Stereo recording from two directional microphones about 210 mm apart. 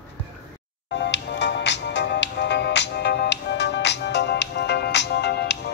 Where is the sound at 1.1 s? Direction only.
55° left (ahead or behind).